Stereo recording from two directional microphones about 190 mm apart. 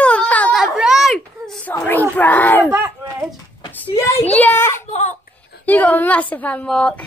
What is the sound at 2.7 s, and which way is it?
Speech, 10° right (ahead or behind).